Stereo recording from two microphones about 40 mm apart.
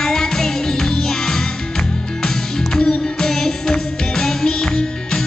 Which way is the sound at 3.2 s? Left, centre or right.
Centre.